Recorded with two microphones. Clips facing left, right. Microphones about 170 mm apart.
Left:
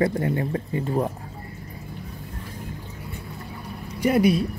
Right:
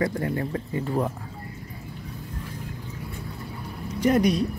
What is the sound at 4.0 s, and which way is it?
Speech, 5° left (ahead or behind).